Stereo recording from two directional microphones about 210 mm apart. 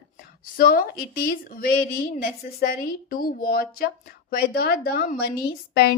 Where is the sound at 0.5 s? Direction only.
40° left (ahead or behind).